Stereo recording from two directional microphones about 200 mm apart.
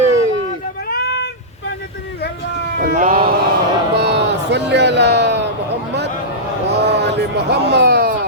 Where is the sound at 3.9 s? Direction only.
55° right (ahead or behind).